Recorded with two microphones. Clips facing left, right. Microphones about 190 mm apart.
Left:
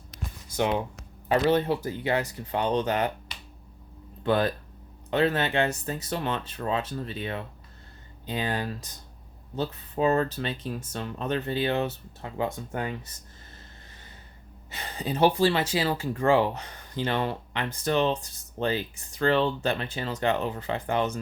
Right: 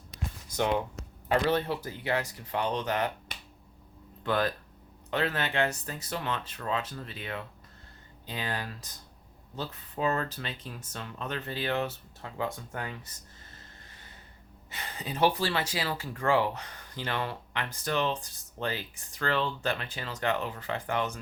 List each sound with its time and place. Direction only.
0.5 s speech: 15° left (ahead or behind)
3.3 s finger snapping: 50° right (ahead or behind)
4.2 s speech: 25° left (ahead or behind)
14.7 s speech: 30° left (ahead or behind)
19.2 s speech: 25° left (ahead or behind)